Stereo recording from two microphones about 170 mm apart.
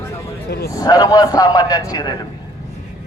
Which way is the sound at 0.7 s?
20° left (ahead or behind).